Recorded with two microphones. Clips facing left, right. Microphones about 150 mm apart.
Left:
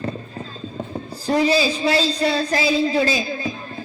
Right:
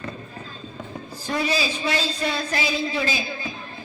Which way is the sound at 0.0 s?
35° left (ahead or behind).